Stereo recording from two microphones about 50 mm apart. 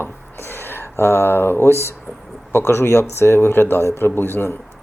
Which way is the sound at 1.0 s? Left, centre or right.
Left.